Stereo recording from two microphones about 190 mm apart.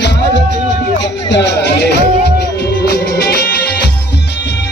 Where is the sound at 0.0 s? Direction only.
65° left (ahead or behind).